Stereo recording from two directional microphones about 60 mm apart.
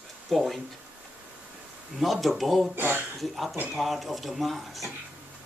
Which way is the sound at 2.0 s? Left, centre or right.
Centre.